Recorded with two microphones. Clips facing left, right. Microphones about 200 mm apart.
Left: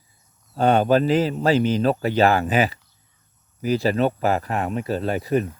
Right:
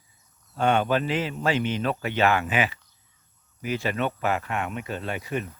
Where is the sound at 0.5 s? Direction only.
35° left (ahead or behind).